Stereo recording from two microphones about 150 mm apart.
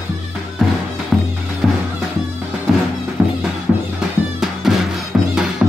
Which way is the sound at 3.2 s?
10° right (ahead or behind).